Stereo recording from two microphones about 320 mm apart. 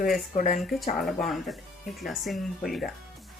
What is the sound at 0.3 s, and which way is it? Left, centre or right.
Speech, left.